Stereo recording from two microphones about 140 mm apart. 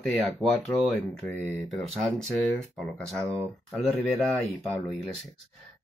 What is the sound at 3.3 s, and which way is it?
Speech, centre (ahead or behind).